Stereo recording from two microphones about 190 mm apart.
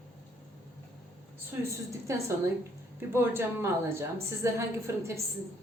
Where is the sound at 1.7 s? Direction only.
15° right (ahead or behind).